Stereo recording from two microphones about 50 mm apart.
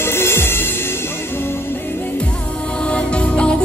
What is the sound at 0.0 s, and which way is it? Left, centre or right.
Music, left.